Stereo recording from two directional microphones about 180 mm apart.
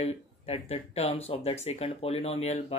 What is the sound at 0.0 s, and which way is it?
Speech, 35° left (ahead or behind).